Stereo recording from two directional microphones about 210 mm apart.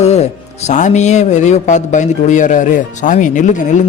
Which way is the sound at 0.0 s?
30° left (ahead or behind).